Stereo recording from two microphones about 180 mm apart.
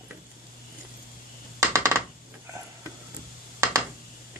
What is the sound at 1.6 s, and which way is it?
Coin, 15° right (ahead or behind).